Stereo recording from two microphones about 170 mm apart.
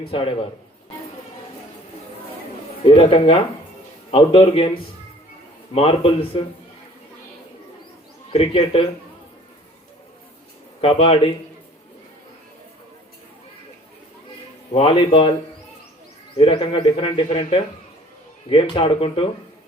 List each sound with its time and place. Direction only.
0.1 s speech: 30° left (ahead or behind)
2.8 s speech: 30° left (ahead or behind)
8.3 s speech: 35° left (ahead or behind)
10.8 s speech: 35° left (ahead or behind)
14.7 s speech: 35° left (ahead or behind)
16.4 s speech: 30° left (ahead or behind)